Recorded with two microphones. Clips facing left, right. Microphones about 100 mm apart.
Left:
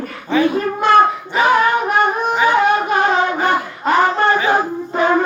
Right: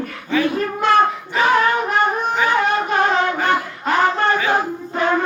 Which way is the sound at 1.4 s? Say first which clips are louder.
Left 2 dB; 15° left (ahead or behind).